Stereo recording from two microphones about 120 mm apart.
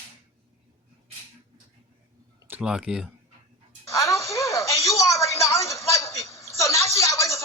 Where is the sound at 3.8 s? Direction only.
25° left (ahead or behind).